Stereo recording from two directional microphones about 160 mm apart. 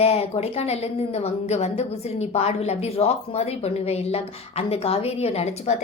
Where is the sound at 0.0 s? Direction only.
40° left (ahead or behind).